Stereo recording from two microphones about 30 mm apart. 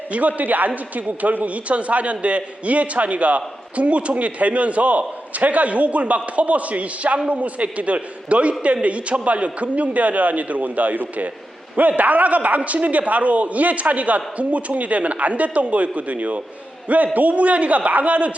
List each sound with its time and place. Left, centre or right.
0.1 s a man's voice: right